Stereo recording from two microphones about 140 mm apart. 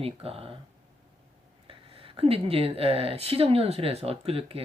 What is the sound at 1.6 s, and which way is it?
Speech, 40° right (ahead or behind).